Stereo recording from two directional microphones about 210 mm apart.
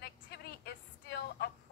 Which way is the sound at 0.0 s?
55° left (ahead or behind).